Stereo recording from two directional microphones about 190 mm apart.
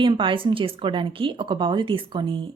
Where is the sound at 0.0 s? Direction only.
25° right (ahead or behind).